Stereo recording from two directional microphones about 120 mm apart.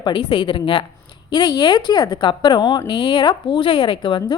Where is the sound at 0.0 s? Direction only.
45° left (ahead or behind).